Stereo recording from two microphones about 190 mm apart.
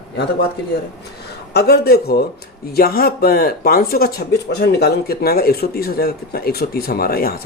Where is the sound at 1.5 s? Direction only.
55° left (ahead or behind).